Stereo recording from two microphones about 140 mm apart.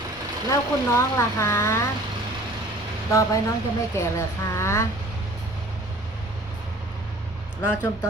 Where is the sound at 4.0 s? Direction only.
20° left (ahead or behind).